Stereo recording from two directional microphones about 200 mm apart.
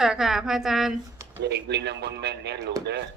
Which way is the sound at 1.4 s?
60° right (ahead or behind).